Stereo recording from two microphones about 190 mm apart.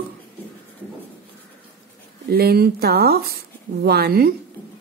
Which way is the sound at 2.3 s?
55° right (ahead or behind).